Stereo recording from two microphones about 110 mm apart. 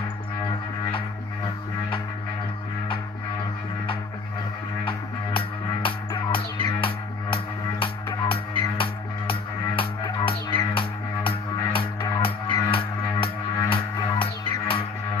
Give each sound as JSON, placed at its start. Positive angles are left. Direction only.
{"t": 5.9, "sound": "music", "side_deg": 50}